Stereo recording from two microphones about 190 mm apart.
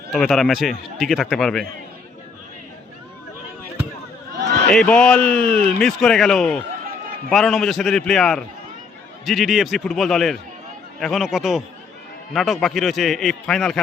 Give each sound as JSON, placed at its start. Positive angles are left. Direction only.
{"t": 0.1, "sound": "a man's voice", "side_deg": 0}
{"t": 4.3, "sound": "a sound", "side_deg": -65}
{"t": 4.7, "sound": "a man's voice", "side_deg": 5}